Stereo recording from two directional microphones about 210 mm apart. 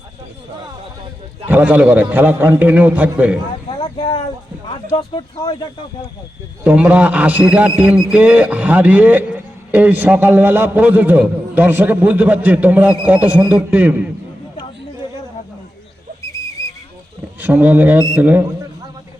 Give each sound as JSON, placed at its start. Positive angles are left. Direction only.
{"t": 1.5, "sound": "a man's voice", "side_deg": -10}
{"t": 3.7, "sound": "vehicle", "side_deg": 20}
{"t": 4.9, "sound": "speech", "side_deg": 25}
{"t": 6.7, "sound": "a man's voice", "side_deg": -10}
{"t": 7.8, "sound": "a sound", "side_deg": -5}
{"t": 8.1, "sound": "a man's voice", "side_deg": -5}
{"t": 16.2, "sound": "whistle", "side_deg": 15}
{"t": 17.4, "sound": "a man's voice", "side_deg": -10}